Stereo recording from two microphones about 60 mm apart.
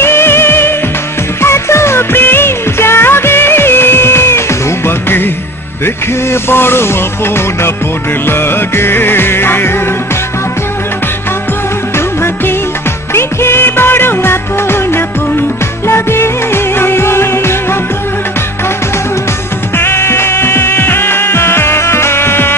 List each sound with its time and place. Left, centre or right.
0.0 s music: left
6.5 s music: left
8.3 s music: left
13.1 s music: left
19.8 s music: left